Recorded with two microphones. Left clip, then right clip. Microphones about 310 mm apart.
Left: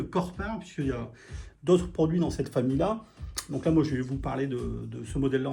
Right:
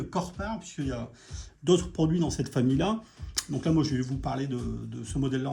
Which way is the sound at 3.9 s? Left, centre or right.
Centre.